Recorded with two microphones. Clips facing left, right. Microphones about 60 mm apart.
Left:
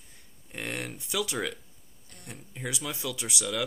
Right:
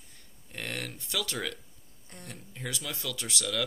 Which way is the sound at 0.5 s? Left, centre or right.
Centre.